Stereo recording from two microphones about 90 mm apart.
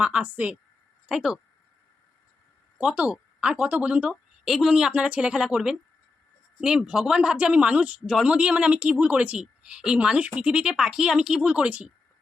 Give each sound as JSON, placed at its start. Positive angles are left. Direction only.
{"t": 0.0, "sound": "a woman's voice", "side_deg": -15}
{"t": 1.0, "sound": "speech", "side_deg": -5}
{"t": 2.7, "sound": "a woman's voice", "side_deg": -10}
{"t": 4.4, "sound": "a woman's voice", "side_deg": -5}